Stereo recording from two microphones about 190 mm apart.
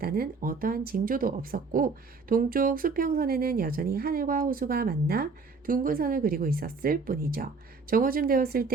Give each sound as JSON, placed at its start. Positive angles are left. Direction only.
{"t": 0.0, "sound": "speech", "side_deg": -50}